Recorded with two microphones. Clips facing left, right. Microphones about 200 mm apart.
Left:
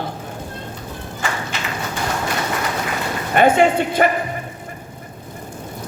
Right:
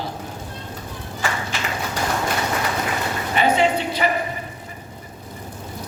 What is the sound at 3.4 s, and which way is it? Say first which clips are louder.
Speech: left 5 dB; 50° left (ahead or behind).